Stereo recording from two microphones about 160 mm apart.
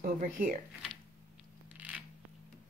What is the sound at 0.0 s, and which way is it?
Speech, 60° right (ahead or behind).